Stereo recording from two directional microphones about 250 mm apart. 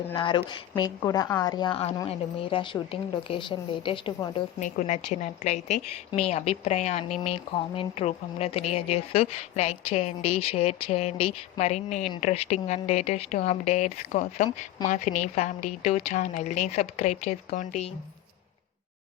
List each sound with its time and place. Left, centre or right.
0.1 s speech: centre